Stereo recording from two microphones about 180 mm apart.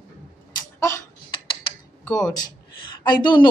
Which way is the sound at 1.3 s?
25° left (ahead or behind).